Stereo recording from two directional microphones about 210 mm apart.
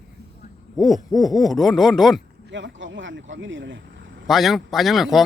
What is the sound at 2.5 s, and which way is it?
Speech, 60° right (ahead or behind).